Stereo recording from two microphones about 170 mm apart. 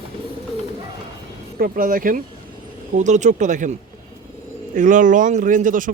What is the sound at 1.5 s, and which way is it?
Speech, 55° right (ahead or behind).